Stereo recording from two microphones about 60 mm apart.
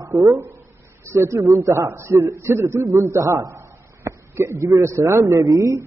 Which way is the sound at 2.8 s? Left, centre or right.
Right.